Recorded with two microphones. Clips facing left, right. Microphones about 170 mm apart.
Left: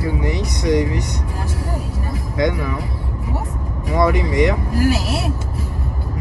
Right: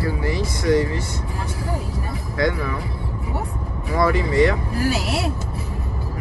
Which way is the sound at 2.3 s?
20° left (ahead or behind).